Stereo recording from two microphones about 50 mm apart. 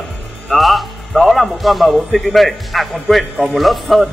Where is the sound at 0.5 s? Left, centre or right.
Centre.